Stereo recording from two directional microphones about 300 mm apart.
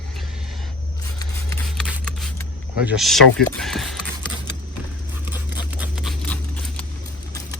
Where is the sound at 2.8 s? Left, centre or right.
Centre.